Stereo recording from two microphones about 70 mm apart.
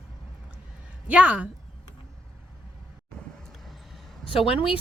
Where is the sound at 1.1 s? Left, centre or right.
Centre.